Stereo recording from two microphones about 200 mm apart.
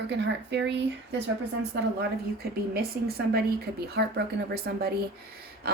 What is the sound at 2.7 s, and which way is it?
A woman's voice, 50° right (ahead or behind).